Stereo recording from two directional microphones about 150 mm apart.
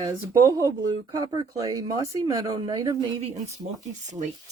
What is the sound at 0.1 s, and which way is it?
Speech, 20° right (ahead or behind).